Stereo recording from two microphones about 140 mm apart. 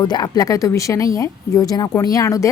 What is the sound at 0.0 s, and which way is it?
Speech, 30° left (ahead or behind).